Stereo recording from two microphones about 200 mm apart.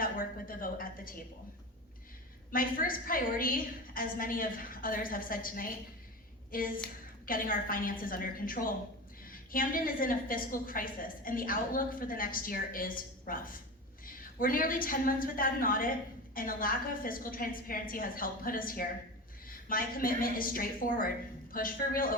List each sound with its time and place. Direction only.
0.0 s a woman's voice: 45° left (ahead or behind)
2.5 s a woman's voice: 45° left (ahead or behind)